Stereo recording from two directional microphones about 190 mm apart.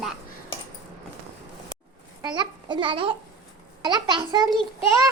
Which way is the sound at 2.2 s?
25° right (ahead or behind).